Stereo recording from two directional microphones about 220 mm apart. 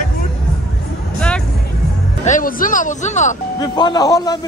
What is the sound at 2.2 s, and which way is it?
Speech, 35° left (ahead or behind).